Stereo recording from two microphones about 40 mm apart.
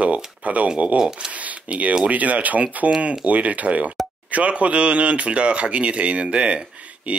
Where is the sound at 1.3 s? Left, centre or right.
Right.